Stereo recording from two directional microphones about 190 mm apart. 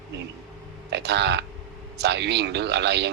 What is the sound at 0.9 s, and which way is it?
A man's voice, 60° right (ahead or behind).